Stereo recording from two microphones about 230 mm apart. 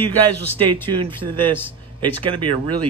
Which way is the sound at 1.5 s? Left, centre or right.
Centre.